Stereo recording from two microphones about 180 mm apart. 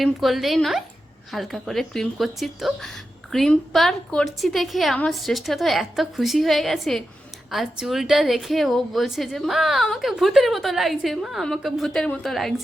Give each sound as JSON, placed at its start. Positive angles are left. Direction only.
{"t": 0.0, "sound": "a woman's voice", "side_deg": 0}